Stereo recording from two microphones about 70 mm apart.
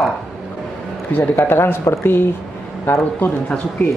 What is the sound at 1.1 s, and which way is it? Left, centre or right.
Speech, left.